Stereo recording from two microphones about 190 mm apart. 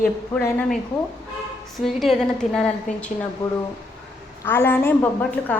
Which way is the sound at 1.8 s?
Centre (ahead or behind).